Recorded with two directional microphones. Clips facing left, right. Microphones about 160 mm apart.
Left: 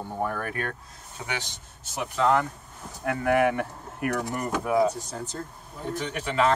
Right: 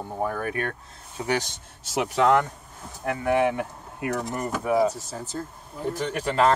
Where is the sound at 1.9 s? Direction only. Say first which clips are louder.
Right 3 dB; 75° right (ahead or behind).